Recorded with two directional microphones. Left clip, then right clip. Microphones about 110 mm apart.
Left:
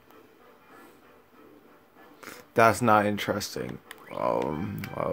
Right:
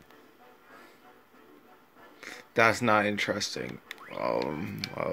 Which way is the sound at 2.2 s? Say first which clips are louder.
Left 3 dB; 25° left (ahead or behind).